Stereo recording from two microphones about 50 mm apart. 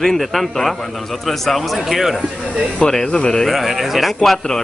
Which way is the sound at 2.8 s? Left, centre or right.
Centre.